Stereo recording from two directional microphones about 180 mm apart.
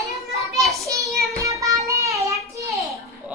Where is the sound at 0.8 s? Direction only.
15° right (ahead or behind).